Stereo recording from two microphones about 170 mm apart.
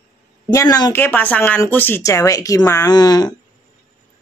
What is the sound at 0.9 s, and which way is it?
Speech, 10° left (ahead or behind).